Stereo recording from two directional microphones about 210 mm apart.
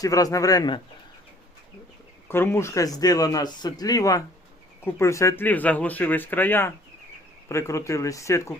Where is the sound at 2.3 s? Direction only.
10° left (ahead or behind).